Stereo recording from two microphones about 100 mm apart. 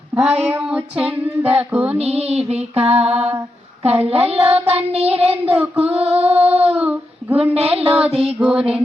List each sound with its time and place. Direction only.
0.2 s child singing: 10° right (ahead or behind)
2.0 s music: 90° right
4.0 s female singing: 85° right
5.3 s child singing: 15° right (ahead or behind)
5.8 s female singing: 80° right
6.7 s child singing: 15° right (ahead or behind)
7.5 s female singing: 90° right
8.0 s child singing: 75° right (ahead or behind)
8.4 s child singing: 10° right (ahead or behind)